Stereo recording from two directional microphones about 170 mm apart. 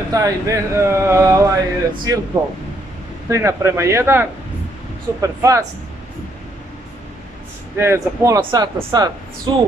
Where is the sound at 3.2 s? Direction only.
15° right (ahead or behind).